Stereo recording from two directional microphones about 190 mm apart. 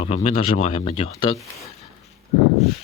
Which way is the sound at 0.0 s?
35° left (ahead or behind).